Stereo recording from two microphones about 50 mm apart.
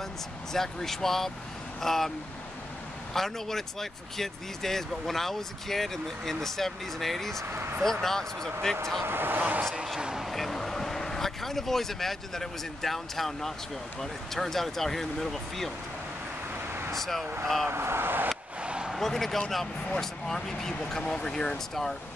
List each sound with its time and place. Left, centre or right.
0.5 s speech: centre
7.4 s speech: right
7.8 s speech: centre
9.0 s speech: right
9.9 s a sound: centre
10.2 s speech: centre
16.9 s speech: centre
17.6 s speech: right
18.6 s a sound: right
18.9 s speech: centre